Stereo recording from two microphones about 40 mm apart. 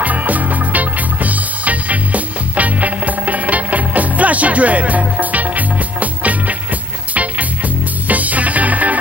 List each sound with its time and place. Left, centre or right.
0.0 s music: right